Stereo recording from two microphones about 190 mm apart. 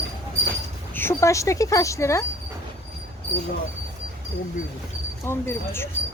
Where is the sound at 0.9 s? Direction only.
15° left (ahead or behind).